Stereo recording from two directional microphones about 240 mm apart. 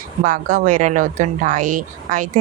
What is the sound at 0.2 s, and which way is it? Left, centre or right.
Speech, right.